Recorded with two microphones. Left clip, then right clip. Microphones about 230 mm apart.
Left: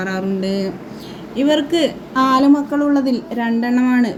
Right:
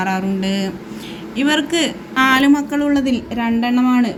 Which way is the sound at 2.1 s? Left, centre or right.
Right.